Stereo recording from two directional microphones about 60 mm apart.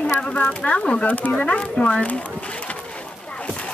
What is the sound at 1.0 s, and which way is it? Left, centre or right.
Speech, left.